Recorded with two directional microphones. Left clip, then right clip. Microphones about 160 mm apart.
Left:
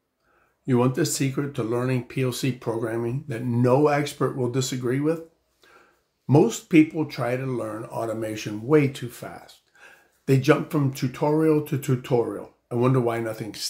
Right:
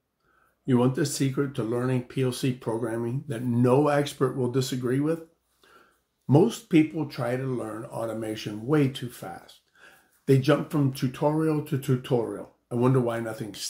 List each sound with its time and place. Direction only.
0.7 s speech: 20° left (ahead or behind)
6.2 s speech: 20° left (ahead or behind)